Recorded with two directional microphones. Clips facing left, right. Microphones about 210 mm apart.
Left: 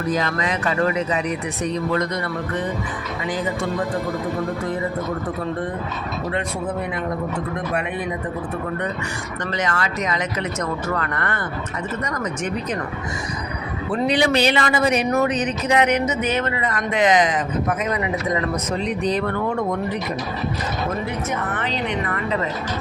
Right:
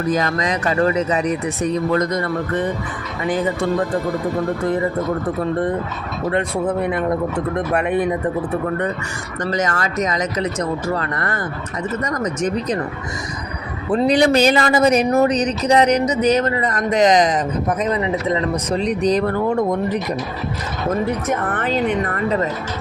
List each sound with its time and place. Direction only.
0.1 s speech: 45° right (ahead or behind)
7.7 s a woman's voice: 55° right (ahead or behind)
9.5 s speech: 40° right (ahead or behind)
13.9 s speech: 40° right (ahead or behind); by 18.8 s 25° right (ahead or behind)
18.8 s speech: 40° right (ahead or behind)
21.5 s a woman's voice: 50° right (ahead or behind)